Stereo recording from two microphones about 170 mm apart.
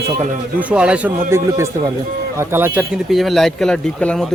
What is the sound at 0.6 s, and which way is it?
A man's voice, 5° right (ahead or behind).